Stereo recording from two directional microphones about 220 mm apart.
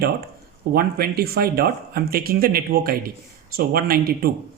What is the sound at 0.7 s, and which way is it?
Speech, 45° right (ahead or behind).